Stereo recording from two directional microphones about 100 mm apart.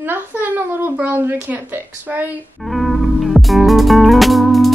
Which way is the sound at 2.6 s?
Centre (ahead or behind).